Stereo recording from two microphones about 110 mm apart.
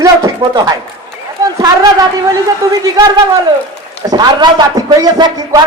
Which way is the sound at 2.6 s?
30° right (ahead or behind).